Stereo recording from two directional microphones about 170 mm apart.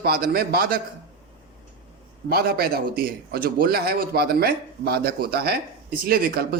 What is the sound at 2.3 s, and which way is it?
A man's voice, 65° right (ahead or behind).